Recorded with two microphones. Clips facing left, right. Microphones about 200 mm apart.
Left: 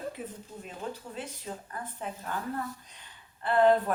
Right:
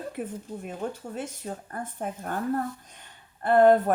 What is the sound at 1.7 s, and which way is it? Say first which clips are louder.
A woman's voice: right 5 dB; 50° right (ahead or behind).